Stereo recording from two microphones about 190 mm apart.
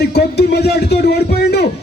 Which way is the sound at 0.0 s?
60° left (ahead or behind).